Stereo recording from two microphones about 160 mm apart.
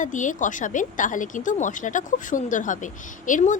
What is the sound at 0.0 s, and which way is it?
A woman's voice, 50° left (ahead or behind).